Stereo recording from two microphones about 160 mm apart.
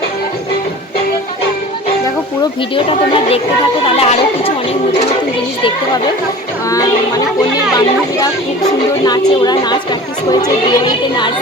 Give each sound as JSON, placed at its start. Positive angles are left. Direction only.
{"t": 2.7, "sound": "speech", "side_deg": 35}
{"t": 6.7, "sound": "speech", "side_deg": 20}
{"t": 9.0, "sound": "speech", "side_deg": 25}